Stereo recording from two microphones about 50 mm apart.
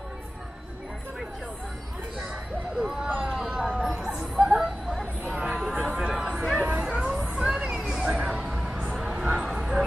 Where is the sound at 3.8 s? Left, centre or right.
Centre.